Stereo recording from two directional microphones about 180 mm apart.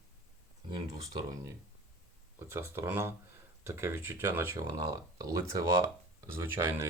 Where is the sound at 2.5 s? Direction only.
15° right (ahead or behind).